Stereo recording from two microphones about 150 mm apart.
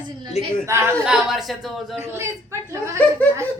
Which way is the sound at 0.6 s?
20° right (ahead or behind).